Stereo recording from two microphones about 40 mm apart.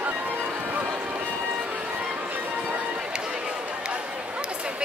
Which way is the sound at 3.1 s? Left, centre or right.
Right.